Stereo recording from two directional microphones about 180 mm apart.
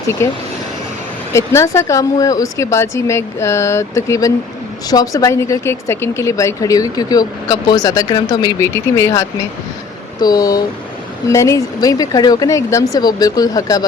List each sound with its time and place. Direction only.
1.3 s speech: 15° left (ahead or behind)